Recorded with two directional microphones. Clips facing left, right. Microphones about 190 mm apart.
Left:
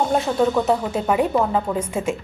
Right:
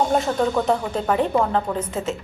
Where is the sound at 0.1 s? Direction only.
Centre (ahead or behind).